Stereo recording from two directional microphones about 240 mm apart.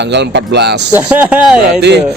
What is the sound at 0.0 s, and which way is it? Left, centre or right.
Speech, right.